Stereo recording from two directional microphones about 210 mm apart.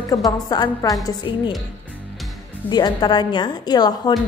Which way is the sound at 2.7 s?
20° left (ahead or behind).